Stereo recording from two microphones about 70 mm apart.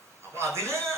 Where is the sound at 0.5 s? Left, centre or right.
Right.